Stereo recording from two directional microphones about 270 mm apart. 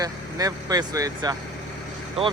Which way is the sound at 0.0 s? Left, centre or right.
Centre.